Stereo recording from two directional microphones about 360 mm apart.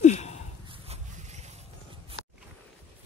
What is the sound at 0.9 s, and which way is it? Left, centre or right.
Boat, centre.